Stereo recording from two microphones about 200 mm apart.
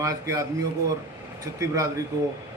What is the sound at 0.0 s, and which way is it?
Speech, 15° right (ahead or behind).